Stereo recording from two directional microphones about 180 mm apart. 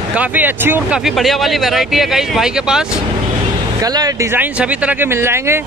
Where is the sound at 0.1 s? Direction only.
10° right (ahead or behind).